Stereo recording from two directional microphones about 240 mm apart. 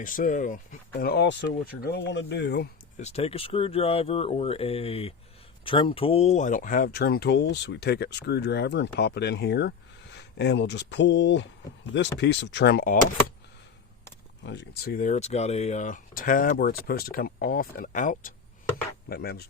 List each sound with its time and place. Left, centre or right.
0.0 s speech: left
3.0 s speech: left
14.4 s speech: left